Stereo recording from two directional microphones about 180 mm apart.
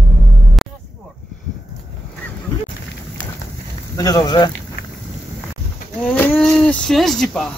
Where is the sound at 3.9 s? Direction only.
20° left (ahead or behind).